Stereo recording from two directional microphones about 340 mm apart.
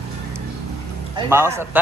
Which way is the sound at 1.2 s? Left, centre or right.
Centre.